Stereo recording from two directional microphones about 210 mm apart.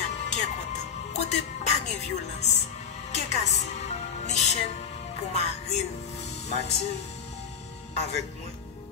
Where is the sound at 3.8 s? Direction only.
30° left (ahead or behind).